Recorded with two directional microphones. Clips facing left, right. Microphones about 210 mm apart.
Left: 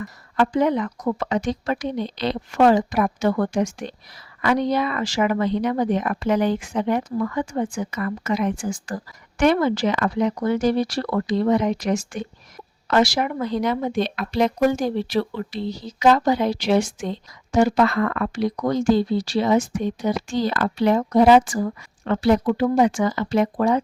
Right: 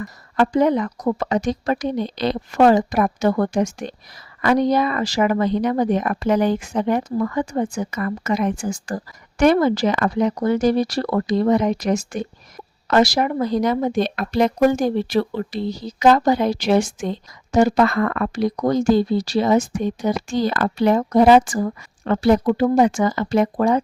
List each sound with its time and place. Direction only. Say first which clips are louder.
0.0 s speech: right 2 dB; 40° right (ahead or behind)